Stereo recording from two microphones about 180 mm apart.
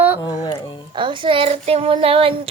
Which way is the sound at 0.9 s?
25° right (ahead or behind).